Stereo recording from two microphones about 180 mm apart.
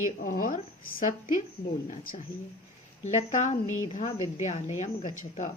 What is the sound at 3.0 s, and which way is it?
Speech, 40° left (ahead or behind).